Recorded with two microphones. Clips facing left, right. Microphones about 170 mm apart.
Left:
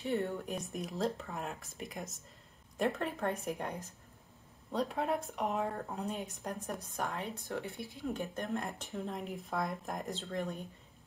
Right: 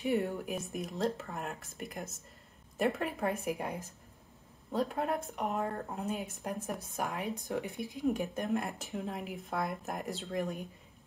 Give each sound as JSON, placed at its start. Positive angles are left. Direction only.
{"t": 0.0, "sound": "speech", "side_deg": -15}
{"t": 10.1, "sound": "speech", "side_deg": -15}